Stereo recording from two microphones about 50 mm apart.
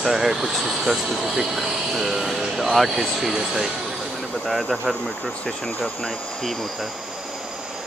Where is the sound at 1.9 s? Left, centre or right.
Centre.